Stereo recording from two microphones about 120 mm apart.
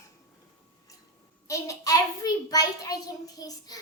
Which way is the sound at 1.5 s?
30° left (ahead or behind).